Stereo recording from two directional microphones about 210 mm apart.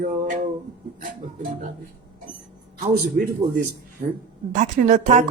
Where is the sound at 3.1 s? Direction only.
35° right (ahead or behind).